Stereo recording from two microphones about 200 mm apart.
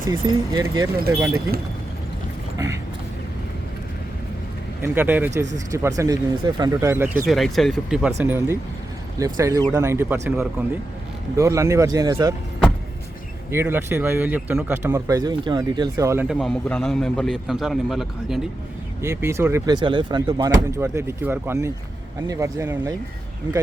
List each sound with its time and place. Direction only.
0.1 s speech: 20° right (ahead or behind)
4.8 s speech: 10° right (ahead or behind)
7.3 s a man's voice: centre (ahead or behind); by 12.3 s 20° right (ahead or behind)
13.5 s speech: 10° right (ahead or behind)
16.2 s a man's voice: centre (ahead or behind)
19.0 s speech: 10° right (ahead or behind)